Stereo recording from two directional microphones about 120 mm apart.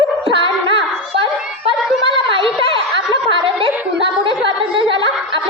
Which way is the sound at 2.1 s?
45° right (ahead or behind).